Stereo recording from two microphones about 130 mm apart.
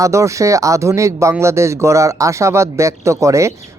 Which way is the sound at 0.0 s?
25° right (ahead or behind).